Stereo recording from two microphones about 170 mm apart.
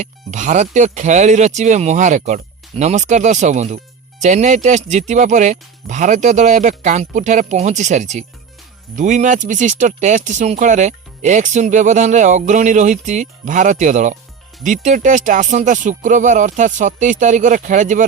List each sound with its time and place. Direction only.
0.0 s speech: 45° right (ahead or behind)